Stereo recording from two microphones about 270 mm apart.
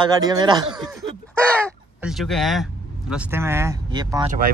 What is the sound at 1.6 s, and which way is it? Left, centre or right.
Speech, centre.